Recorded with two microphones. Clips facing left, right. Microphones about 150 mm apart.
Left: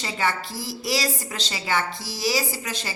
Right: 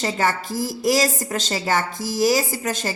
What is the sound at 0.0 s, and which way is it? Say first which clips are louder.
A woman's voice: right 4 dB; 45° right (ahead or behind).